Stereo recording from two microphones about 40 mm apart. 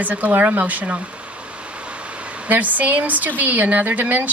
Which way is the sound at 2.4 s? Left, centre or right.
Right.